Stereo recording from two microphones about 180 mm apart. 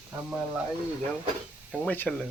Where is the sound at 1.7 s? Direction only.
10° left (ahead or behind).